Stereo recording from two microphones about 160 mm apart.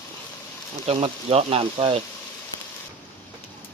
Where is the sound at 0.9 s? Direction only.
40° right (ahead or behind).